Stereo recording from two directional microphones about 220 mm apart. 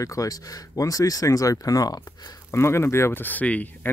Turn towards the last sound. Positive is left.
turn(degrees=5)  # may be behind; listen again after turning